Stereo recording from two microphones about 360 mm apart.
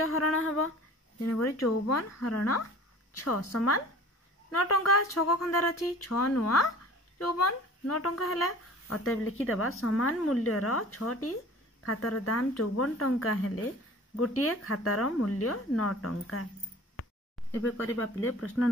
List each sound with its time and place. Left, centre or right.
0.0 s speech: left
17.9 s speech: left